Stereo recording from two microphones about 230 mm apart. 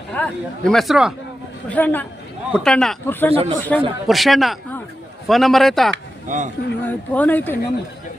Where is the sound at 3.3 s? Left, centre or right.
Right.